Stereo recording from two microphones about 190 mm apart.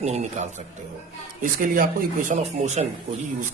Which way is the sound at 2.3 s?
35° right (ahead or behind).